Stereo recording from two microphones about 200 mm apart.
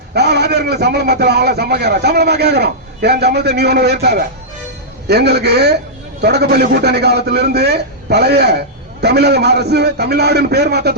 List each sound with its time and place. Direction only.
0.1 s a man's voice: 55° right (ahead or behind)